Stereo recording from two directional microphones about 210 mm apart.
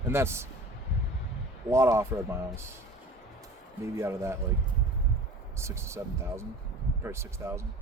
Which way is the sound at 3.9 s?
15° right (ahead or behind).